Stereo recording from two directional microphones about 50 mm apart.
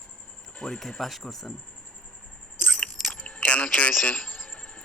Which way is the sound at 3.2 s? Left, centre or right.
Left.